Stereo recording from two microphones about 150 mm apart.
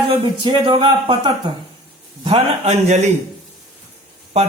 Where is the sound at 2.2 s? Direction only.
45° right (ahead or behind).